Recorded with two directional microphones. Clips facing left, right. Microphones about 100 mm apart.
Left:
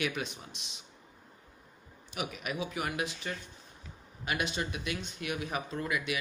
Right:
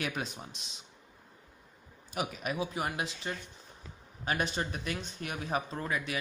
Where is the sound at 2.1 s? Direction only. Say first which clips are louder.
Right 2 dB; 35° right (ahead or behind).